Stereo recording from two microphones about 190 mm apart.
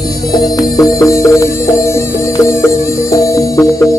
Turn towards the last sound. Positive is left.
turn(degrees=15)  # may be behind; listen again after turning